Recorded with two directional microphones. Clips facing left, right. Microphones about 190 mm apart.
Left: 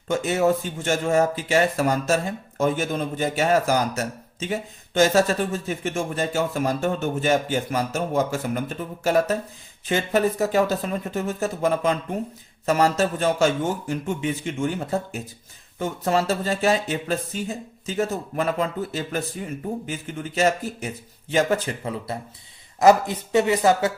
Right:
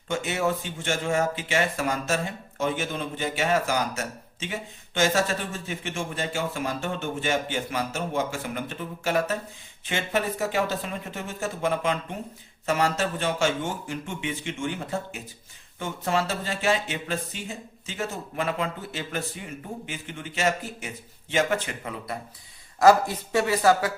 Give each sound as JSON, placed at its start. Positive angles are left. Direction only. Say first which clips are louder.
{"t": 0.1, "sound": "speech", "louder": "left 6 dB", "side_deg": 40}